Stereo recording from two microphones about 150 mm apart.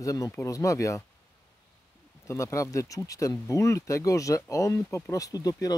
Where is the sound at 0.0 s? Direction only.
20° left (ahead or behind).